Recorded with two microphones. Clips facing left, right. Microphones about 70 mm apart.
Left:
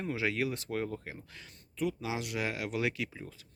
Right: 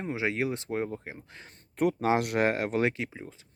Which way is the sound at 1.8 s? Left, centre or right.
Right.